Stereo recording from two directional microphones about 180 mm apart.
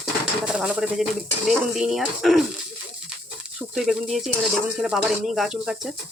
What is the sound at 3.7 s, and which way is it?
Speech, centre (ahead or behind).